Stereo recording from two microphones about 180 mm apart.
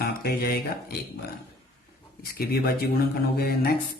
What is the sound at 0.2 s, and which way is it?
Speech, 60° left (ahead or behind).